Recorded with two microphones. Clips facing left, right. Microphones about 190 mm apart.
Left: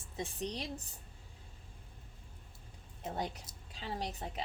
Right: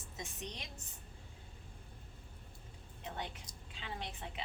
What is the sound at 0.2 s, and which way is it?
Speech, 35° left (ahead or behind).